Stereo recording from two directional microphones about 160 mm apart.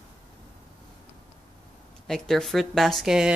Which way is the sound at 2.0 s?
5° left (ahead or behind).